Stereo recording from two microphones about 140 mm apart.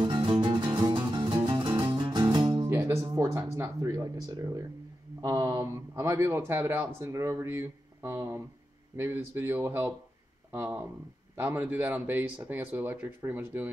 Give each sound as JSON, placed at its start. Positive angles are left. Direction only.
{"t": 0.0, "sound": "music", "side_deg": -35}
{"t": 2.7, "sound": "speech", "side_deg": -15}